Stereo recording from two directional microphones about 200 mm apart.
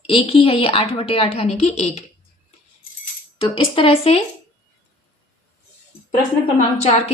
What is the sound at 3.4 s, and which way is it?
Speech, 25° left (ahead or behind).